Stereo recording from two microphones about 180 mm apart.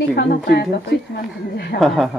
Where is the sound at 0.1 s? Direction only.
60° left (ahead or behind).